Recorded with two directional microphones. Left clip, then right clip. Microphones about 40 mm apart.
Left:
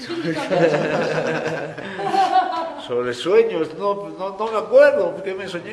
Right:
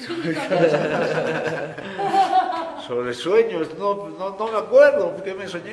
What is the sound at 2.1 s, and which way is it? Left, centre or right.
A man's voice, centre.